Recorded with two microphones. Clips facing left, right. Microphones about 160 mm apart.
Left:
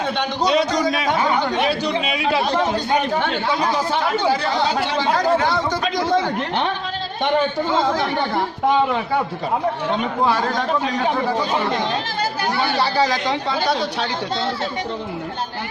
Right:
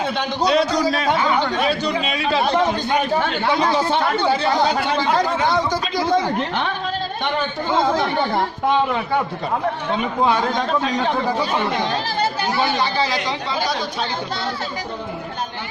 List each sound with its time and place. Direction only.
0.0 s a man's voice: centre (ahead or behind)
2.0 s a man's voice: 10° left (ahead or behind)
5.1 s speech: 15° right (ahead or behind)
12.2 s chatter: 20° right (ahead or behind)
12.7 s speech: 40° left (ahead or behind); by 14.1 s 55° left (ahead or behind)